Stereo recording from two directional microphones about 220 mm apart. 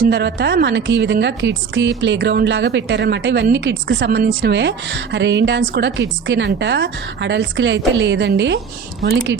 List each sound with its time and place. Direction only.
0.1 s a woman's voice: 50° right (ahead or behind)